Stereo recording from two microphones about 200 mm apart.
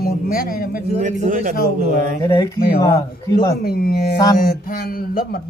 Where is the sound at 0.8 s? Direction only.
35° right (ahead or behind).